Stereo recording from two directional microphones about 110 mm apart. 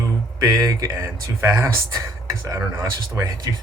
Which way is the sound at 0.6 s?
30° right (ahead or behind).